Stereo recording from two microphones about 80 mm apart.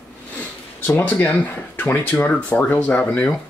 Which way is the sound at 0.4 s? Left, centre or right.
Left.